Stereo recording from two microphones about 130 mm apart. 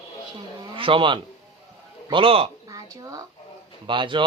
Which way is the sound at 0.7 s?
45° right (ahead or behind).